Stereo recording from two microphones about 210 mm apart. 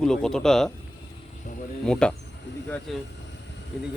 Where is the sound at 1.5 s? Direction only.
35° left (ahead or behind).